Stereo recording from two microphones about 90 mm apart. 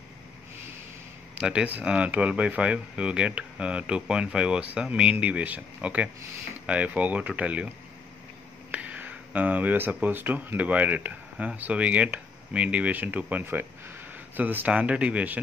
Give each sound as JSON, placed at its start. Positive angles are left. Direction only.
{"t": 1.4, "sound": "speech", "side_deg": -10}
{"t": 8.7, "sound": "speech", "side_deg": -15}